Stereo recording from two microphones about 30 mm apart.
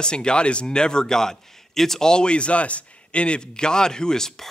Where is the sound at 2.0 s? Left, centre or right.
Left.